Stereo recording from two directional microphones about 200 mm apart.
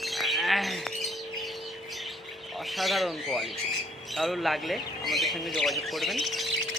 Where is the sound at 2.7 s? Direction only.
Centre (ahead or behind).